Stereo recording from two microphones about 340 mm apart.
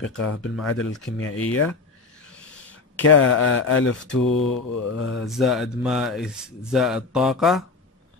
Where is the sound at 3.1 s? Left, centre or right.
Left.